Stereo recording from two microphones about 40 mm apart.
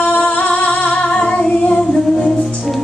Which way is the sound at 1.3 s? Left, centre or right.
Left.